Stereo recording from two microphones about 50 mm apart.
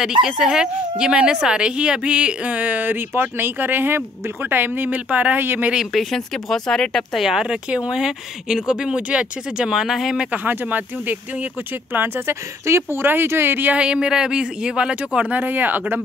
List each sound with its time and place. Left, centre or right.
0.0 s speech: centre; by 5.4 s right
5.4 s speech: right
5.9 s speech: centre
7.2 s speech: centre
10.3 s speech: right
12.3 s speech: right
13.0 s speech: right
13.7 s speech: right
15.3 s speech: right